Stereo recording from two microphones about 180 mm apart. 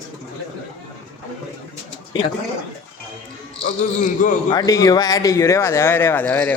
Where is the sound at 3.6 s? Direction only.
45° left (ahead or behind).